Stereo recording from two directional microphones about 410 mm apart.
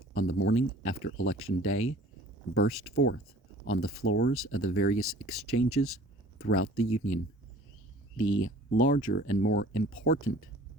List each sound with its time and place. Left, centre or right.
0.1 s speech: left